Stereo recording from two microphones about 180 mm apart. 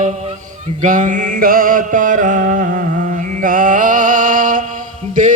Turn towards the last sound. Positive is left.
turn(degrees=-45)  # may be behind; listen again after turning